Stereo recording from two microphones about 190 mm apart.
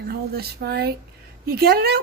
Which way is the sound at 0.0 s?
55° right (ahead or behind).